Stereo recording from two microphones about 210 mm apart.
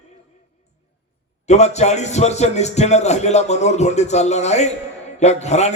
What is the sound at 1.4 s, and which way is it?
A man's voice, 30° left (ahead or behind).